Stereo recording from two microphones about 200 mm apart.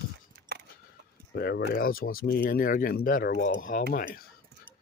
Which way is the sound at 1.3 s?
50° left (ahead or behind).